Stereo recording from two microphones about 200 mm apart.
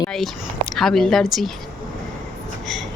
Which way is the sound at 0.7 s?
Centre (ahead or behind).